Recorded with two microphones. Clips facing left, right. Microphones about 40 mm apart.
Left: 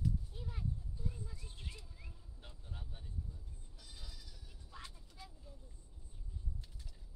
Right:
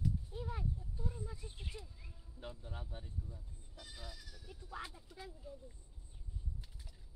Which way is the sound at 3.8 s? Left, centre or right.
Right.